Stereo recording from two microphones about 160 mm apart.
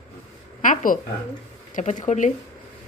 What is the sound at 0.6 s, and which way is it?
Speech, 55° left (ahead or behind).